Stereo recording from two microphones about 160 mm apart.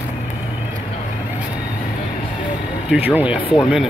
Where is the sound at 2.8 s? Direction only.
10° right (ahead or behind).